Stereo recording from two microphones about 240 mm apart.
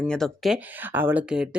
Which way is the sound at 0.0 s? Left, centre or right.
Centre.